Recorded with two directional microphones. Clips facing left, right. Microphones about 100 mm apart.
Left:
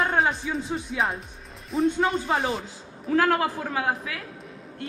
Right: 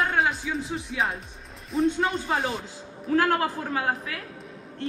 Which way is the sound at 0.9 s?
Centre (ahead or behind).